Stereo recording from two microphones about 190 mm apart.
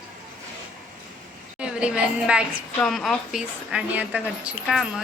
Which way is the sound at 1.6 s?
5° right (ahead or behind).